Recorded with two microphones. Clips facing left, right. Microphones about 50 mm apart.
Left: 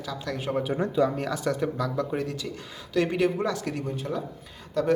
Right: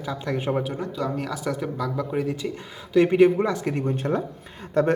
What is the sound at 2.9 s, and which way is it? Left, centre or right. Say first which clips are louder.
A man's voice: right 7 dB; right.